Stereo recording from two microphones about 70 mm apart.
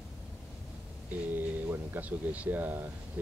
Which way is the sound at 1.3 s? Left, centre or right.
Right.